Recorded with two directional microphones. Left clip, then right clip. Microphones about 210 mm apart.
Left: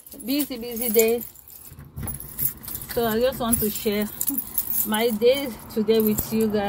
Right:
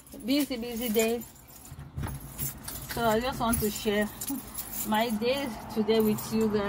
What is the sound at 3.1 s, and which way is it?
Speech, 15° left (ahead or behind).